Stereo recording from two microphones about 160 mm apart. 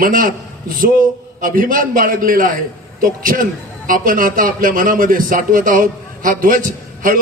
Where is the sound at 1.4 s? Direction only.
60° right (ahead or behind).